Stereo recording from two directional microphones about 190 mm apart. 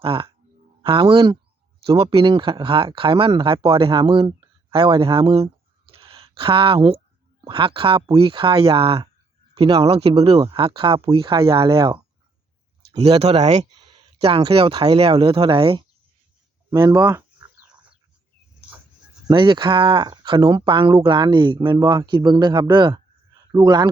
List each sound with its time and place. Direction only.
0.0 s speech: 30° right (ahead or behind)
5.9 s a sound: 30° right (ahead or behind)
7.4 s speech: 25° right (ahead or behind)
13.0 s speech: 30° right (ahead or behind)
16.6 s a sound: 20° right (ahead or behind)
19.3 s speech: 25° right (ahead or behind)